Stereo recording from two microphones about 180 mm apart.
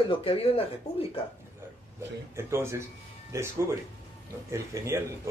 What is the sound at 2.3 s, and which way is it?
Speech, 15° right (ahead or behind).